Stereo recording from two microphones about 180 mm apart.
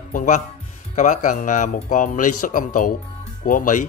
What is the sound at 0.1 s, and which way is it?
Speech, 45° left (ahead or behind).